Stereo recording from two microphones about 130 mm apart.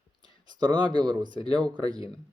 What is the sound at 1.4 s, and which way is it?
Speech, 5° left (ahead or behind).